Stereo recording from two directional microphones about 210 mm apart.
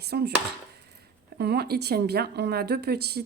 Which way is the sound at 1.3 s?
50° right (ahead or behind).